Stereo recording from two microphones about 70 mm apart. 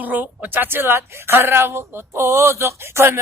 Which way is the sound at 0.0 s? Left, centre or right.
Right.